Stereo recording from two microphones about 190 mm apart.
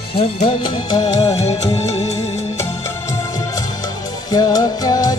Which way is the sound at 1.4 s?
35° left (ahead or behind).